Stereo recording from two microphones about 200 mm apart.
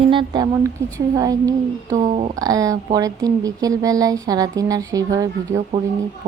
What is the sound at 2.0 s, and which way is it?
Speech, 35° right (ahead or behind).